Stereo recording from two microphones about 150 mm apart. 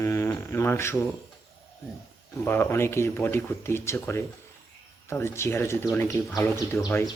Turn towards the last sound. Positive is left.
turn(degrees=15)  # may be behind; listen again after turning